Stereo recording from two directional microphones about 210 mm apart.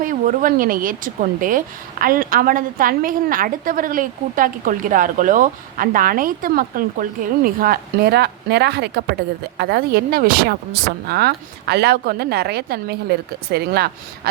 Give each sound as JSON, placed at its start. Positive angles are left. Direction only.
{"t": 0.0, "sound": "a woman's voice", "side_deg": -40}